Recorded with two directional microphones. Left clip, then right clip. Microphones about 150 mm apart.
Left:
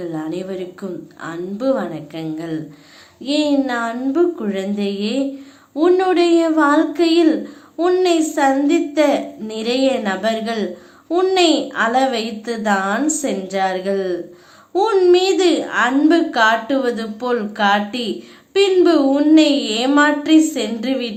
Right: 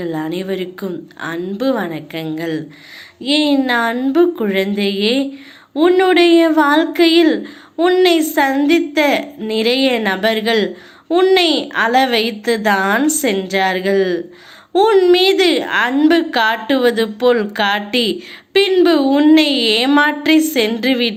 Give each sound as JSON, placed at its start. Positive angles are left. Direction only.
{"t": 0.0, "sound": "a woman's voice", "side_deg": -25}
{"t": 11.1, "sound": "a woman's voice", "side_deg": -15}